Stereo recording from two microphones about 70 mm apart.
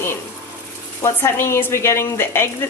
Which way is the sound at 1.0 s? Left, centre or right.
Left.